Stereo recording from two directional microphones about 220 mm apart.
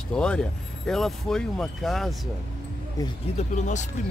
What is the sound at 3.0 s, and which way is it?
Speech, 30° left (ahead or behind).